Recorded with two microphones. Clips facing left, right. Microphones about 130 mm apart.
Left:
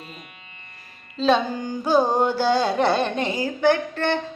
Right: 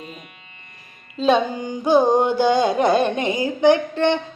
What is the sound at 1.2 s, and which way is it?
Carnatic music, 15° right (ahead or behind).